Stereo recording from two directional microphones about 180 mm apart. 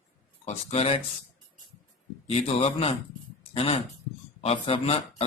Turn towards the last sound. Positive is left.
turn(degrees=30)  # may be behind; listen again after turning